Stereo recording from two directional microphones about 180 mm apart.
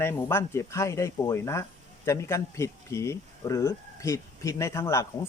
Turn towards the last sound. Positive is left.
turn(degrees=15)  # may be behind; listen again after turning